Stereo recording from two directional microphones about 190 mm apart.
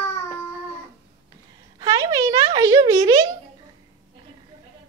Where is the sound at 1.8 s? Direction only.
20° right (ahead or behind).